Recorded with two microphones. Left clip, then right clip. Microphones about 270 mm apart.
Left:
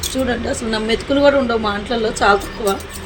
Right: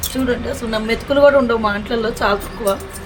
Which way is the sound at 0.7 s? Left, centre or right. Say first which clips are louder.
Right 1 dB; centre.